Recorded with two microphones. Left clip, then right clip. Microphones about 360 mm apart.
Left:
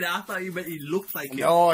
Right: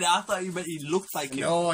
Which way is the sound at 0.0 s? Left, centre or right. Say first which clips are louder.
Right 3 dB; centre.